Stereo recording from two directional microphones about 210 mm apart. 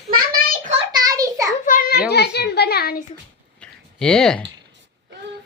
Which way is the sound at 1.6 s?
40° left (ahead or behind).